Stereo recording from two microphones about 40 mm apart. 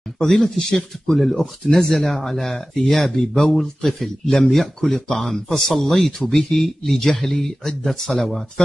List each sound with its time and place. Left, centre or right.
0.2 s speech: centre